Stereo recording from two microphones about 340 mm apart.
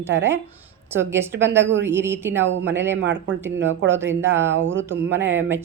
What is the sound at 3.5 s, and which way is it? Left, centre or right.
Speech, right.